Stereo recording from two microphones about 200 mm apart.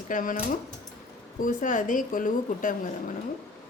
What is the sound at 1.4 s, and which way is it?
Speech, 40° left (ahead or behind).